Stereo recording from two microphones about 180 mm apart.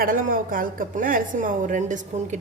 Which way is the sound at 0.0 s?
50° right (ahead or behind).